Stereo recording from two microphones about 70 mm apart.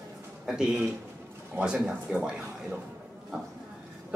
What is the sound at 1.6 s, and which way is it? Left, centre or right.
Speech, centre.